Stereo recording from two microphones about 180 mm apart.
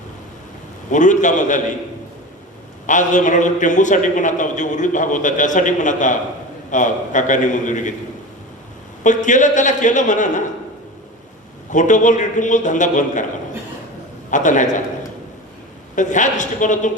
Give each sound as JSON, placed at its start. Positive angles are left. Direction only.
{"t": 0.9, "sound": "a man's voice", "side_deg": 45}
{"t": 2.8, "sound": "a man's voice", "side_deg": 45}
{"t": 9.0, "sound": "a man's voice", "side_deg": 45}
{"t": 11.7, "sound": "a man's voice", "side_deg": 45}
{"t": 14.3, "sound": "a man's voice", "side_deg": 45}
{"t": 16.0, "sound": "a man's voice", "side_deg": 45}